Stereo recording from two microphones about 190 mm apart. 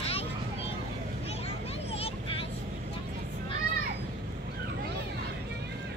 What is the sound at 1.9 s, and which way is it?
Vehicle, 30° left (ahead or behind).